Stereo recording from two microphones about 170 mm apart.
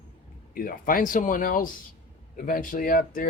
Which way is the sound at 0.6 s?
55° left (ahead or behind).